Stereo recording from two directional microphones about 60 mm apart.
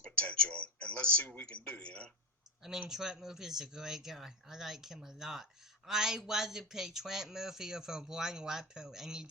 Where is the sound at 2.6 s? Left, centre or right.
Centre.